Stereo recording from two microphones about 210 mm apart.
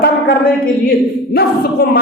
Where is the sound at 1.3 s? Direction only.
50° left (ahead or behind).